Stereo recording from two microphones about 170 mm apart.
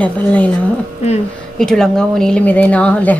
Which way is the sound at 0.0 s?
10° left (ahead or behind).